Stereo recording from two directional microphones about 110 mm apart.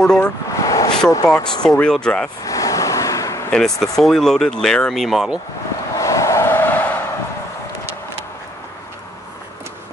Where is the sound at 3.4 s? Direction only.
5° left (ahead or behind).